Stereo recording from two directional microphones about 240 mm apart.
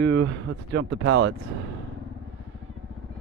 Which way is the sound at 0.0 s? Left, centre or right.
Right.